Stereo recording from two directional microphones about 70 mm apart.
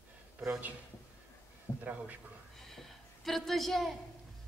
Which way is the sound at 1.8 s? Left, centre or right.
Right.